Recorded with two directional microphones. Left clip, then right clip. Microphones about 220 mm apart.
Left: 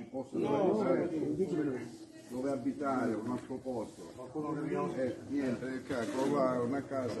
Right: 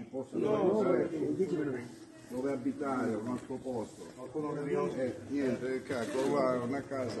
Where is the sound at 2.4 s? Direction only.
45° right (ahead or behind).